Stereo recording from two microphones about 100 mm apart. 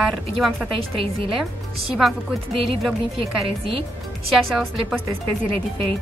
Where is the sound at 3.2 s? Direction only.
70° right (ahead or behind).